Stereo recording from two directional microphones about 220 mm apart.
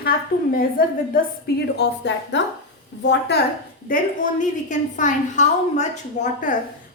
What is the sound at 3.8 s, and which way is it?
A woman's voice, 35° left (ahead or behind).